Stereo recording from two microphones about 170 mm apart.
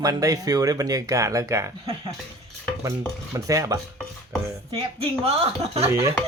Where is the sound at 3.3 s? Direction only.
20° right (ahead or behind).